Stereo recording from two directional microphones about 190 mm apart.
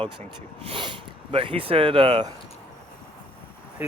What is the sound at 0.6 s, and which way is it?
Speech, 25° right (ahead or behind).